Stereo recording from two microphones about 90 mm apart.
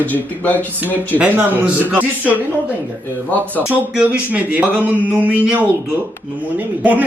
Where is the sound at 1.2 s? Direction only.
10° right (ahead or behind).